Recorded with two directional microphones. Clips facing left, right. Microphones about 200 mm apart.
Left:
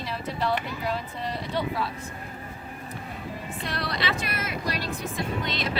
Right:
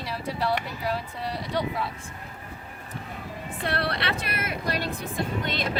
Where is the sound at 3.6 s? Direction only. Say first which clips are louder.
Right 2 dB; 60° right (ahead or behind).